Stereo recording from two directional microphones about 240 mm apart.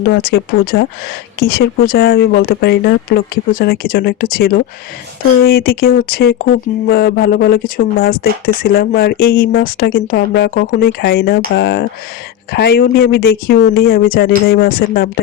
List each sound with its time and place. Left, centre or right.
0.1 s speech: left